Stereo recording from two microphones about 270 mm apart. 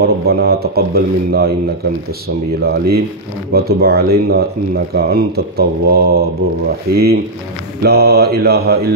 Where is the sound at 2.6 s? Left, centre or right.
Right.